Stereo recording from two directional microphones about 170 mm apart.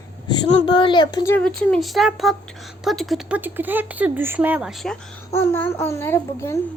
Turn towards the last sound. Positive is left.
turn(degrees=15)  # may be behind; listen again after turning